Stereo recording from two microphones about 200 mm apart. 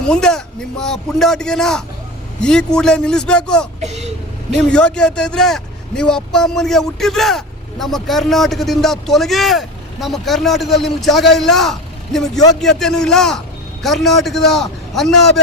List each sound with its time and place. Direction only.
0.0 s a man's voice: 5° left (ahead or behind)
3.8 s speech: 35° right (ahead or behind)
4.5 s a man's voice: 5° left (ahead or behind)